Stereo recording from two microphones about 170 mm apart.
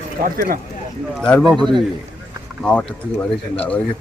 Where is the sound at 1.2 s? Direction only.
5° left (ahead or behind).